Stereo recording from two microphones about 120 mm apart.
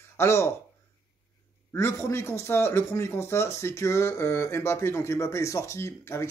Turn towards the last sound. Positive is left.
turn(degrees=20)  # may be behind; listen again after turning